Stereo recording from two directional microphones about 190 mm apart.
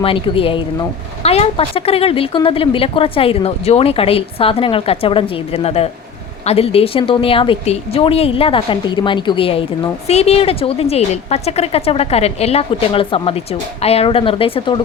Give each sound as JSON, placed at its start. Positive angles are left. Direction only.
{"t": 0.0, "sound": "speech", "side_deg": 30}